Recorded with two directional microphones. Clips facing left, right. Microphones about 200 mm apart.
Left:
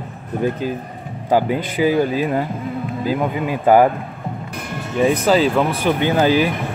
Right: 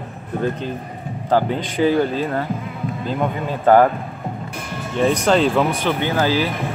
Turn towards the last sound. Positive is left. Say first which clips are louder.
# left 3 dB
turn(degrees=15)  # may be behind; listen again after turning